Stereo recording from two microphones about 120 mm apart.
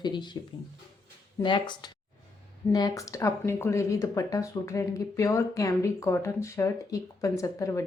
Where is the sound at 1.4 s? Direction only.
40° left (ahead or behind).